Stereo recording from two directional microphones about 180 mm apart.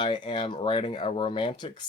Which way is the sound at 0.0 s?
25° left (ahead or behind).